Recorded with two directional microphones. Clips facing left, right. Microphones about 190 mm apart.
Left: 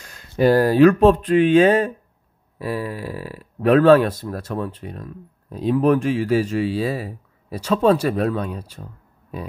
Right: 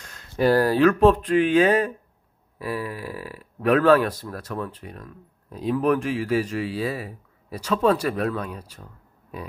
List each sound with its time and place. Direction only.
0.4 s speech: 20° left (ahead or behind)